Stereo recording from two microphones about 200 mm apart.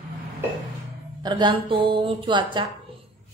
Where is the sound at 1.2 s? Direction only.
20° right (ahead or behind).